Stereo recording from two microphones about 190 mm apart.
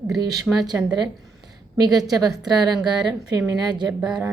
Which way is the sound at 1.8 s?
20° right (ahead or behind).